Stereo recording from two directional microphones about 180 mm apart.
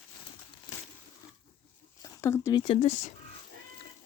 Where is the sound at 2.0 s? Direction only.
15° left (ahead or behind); by 3.1 s 40° left (ahead or behind).